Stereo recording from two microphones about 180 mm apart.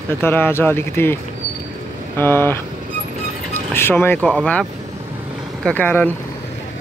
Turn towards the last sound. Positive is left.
turn(degrees=10)  # may be behind; listen again after turning